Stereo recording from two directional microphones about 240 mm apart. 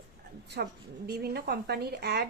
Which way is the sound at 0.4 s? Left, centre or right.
Right.